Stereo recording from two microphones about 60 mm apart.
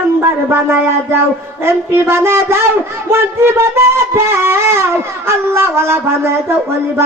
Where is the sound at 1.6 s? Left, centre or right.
Right.